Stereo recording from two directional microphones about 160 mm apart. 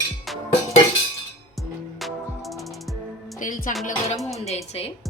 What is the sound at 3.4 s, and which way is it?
Music, 55° left (ahead or behind).